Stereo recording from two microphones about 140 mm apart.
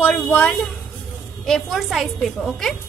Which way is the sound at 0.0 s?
10° left (ahead or behind).